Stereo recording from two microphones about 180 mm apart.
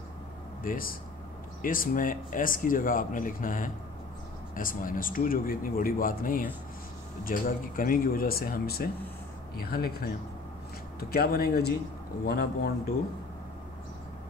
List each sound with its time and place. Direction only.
0.7 s speech: 55° left (ahead or behind)